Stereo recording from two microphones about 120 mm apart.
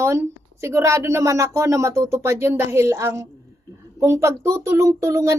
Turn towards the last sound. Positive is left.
turn(degrees=-25)  # may be behind; listen again after turning